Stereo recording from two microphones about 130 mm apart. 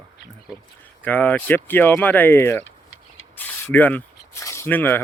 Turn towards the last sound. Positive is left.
turn(degrees=15)  # may be behind; listen again after turning